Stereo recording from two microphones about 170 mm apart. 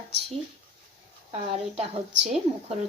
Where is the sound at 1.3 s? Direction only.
35° right (ahead or behind).